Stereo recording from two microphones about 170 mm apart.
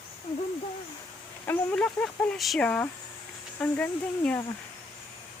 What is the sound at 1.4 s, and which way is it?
Speech, 10° left (ahead or behind).